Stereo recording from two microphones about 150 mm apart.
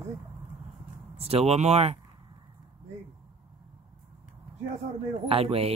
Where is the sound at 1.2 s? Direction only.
40° right (ahead or behind).